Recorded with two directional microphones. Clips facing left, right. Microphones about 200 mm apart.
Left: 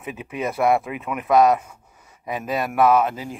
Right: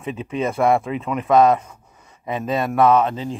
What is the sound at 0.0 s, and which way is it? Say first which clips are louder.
Speech: right 5 dB; 25° right (ahead or behind).